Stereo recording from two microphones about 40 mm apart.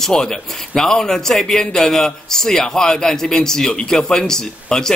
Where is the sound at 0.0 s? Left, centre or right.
Centre.